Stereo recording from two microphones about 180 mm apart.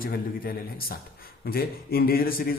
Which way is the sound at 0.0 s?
55° left (ahead or behind).